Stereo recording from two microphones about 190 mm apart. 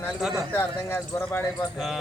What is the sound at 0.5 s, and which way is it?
Speech, 15° left (ahead or behind).